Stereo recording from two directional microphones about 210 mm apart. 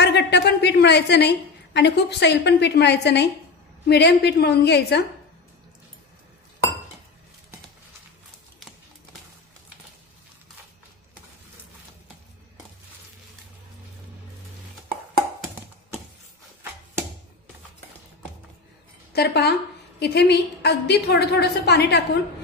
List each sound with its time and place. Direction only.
0.0 s a woman's voice: 55° left (ahead or behind)
19.1 s a sound: 50° left (ahead or behind)
20.0 s a woman's voice: 50° left (ahead or behind)